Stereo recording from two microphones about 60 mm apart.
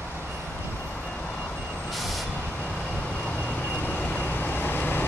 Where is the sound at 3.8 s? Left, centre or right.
Left.